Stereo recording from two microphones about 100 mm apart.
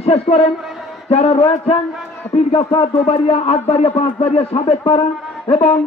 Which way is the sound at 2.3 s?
70° left (ahead or behind).